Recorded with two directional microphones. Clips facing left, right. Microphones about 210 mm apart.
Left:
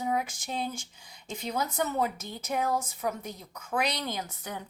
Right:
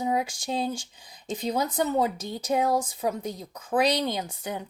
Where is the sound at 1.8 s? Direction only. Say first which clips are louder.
Right 5 dB; 35° right (ahead or behind).